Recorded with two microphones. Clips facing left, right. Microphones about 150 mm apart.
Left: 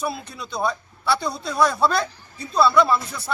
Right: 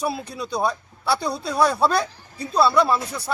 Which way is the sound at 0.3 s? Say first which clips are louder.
Right 5 dB; 35° right (ahead or behind).